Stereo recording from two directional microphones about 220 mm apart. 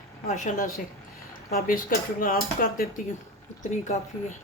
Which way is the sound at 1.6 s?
40° left (ahead or behind).